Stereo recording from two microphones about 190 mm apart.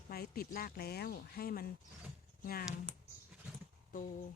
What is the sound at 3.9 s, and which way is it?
Speech, 45° left (ahead or behind).